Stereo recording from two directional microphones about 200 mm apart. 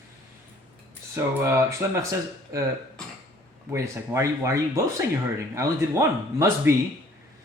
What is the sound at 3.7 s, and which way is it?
Speech, 15° right (ahead or behind).